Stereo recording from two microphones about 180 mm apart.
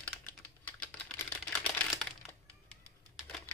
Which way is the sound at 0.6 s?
10° left (ahead or behind).